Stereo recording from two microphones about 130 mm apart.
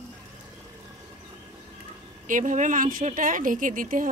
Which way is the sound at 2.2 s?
85° right.